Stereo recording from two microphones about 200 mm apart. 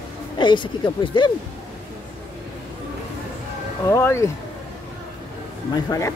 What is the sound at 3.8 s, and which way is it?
Speech, 15° left (ahead or behind).